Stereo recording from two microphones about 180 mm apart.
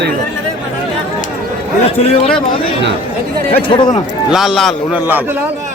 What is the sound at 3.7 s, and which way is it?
Speech, 25° left (ahead or behind).